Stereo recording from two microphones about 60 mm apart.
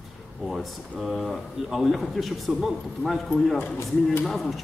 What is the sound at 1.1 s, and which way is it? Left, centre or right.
A man's voice, centre.